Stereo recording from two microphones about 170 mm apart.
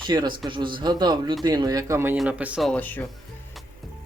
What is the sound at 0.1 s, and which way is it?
Speech, 25° right (ahead or behind).